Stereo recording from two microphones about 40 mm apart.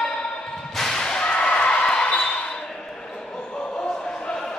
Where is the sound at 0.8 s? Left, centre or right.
Centre.